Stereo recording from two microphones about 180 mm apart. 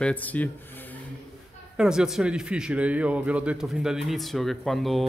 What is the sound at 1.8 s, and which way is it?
Speech, 5° right (ahead or behind).